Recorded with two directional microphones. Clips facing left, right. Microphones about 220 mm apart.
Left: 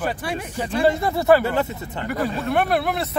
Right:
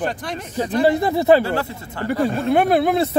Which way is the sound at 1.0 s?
20° right (ahead or behind).